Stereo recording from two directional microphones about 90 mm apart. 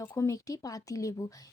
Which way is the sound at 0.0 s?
30° left (ahead or behind).